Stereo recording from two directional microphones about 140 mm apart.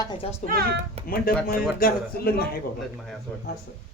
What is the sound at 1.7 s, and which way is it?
Speech, 90° left.